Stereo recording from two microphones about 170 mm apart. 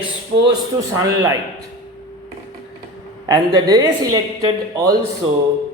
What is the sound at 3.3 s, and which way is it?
A woman's voice, 20° right (ahead or behind).